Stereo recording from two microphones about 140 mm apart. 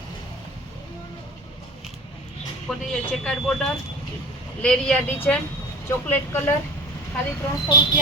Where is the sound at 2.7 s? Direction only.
5° left (ahead or behind).